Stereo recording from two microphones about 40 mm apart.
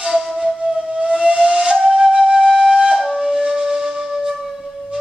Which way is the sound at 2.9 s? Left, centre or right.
Centre.